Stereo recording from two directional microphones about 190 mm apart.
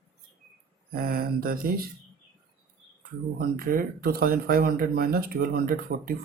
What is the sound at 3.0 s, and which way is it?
Speech, 50° right (ahead or behind).